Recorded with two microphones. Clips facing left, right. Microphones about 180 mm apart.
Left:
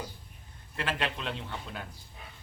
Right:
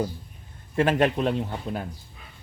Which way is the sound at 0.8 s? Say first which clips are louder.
Right 12 dB; 50° right (ahead or behind).